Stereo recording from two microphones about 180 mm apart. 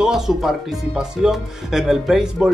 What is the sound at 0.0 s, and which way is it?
Speech, centre (ahead or behind).